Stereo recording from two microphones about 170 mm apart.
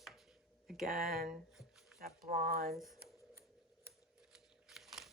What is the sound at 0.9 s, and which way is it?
Speech, 60° right (ahead or behind).